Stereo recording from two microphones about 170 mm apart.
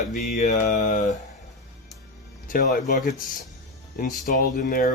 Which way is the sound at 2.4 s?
50° left (ahead or behind).